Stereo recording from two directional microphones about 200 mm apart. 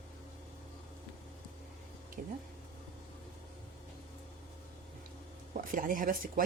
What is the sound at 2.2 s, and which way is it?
Speech, 40° right (ahead or behind).